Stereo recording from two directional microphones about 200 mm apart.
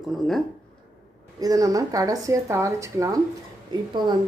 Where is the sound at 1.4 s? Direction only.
15° right (ahead or behind).